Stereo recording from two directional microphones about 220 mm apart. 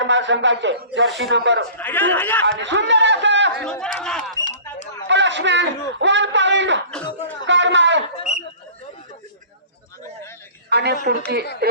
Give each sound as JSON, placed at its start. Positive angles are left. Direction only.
{"t": 0.0, "sound": "a man's voice", "side_deg": -55}
{"t": 1.8, "sound": "a man's voice", "side_deg": 10}
{"t": 2.4, "sound": "a man's voice", "side_deg": -55}
{"t": 3.6, "sound": "speech", "side_deg": 5}
{"t": 5.0, "sound": "a man's voice", "side_deg": -55}
{"t": 7.4, "sound": "a sound", "side_deg": -55}
{"t": 8.1, "sound": "a sound", "side_deg": 30}
{"t": 10.7, "sound": "a man's voice", "side_deg": -50}